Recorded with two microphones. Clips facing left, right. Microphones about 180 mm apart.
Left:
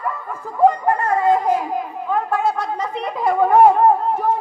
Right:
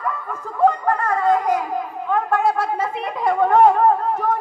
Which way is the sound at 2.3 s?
Centre (ahead or behind).